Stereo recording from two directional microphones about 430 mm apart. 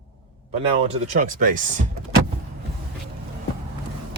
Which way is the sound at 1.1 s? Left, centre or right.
Centre.